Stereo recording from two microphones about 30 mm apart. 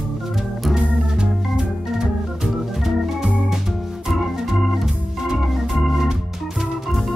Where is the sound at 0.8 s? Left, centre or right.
Right.